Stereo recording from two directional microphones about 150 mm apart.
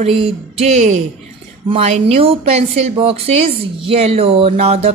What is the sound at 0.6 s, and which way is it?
A woman's voice, 45° right (ahead or behind).